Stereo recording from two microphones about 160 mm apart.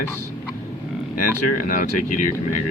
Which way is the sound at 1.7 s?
55° left (ahead or behind).